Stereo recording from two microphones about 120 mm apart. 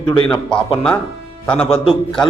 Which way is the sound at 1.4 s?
10° left (ahead or behind).